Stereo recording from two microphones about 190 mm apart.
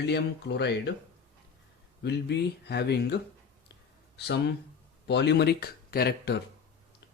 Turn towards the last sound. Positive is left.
turn(degrees=55)  # may be behind; listen again after turning